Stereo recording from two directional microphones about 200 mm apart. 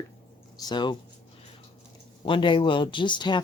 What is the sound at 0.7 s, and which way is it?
Speech, 20° left (ahead or behind).